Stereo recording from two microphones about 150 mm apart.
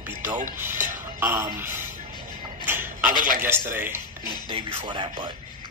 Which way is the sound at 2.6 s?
15° right (ahead or behind).